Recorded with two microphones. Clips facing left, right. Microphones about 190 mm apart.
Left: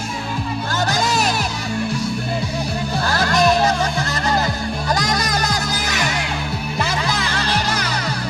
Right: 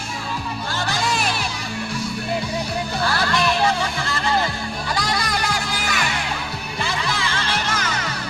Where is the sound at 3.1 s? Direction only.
40° left (ahead or behind).